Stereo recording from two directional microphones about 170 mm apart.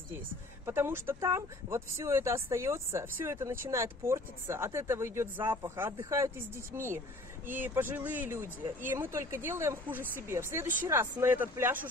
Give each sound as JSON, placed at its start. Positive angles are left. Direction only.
{"t": 0.7, "sound": "speech", "side_deg": -15}